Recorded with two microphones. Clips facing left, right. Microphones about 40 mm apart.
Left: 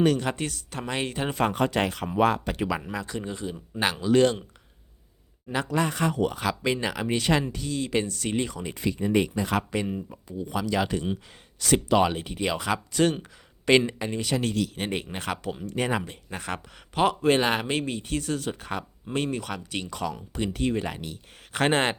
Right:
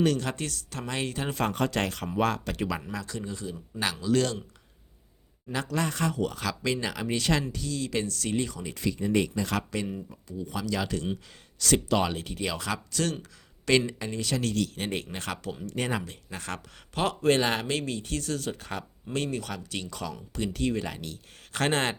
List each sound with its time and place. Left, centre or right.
0.0 s speech: centre
5.5 s speech: centre